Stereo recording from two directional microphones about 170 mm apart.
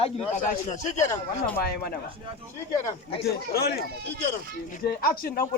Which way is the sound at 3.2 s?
65° left (ahead or behind).